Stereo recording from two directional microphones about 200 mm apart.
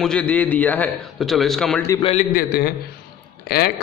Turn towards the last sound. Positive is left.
turn(degrees=50)  # may be behind; listen again after turning